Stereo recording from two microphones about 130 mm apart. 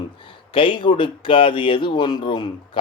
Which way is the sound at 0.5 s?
40° left (ahead or behind).